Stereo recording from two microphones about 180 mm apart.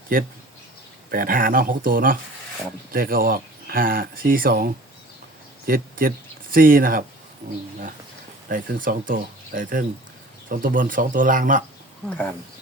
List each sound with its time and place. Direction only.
0.1 s speech: 50° right (ahead or behind)
8.4 s speech: 50° right (ahead or behind)
12.0 s speech: 5° left (ahead or behind)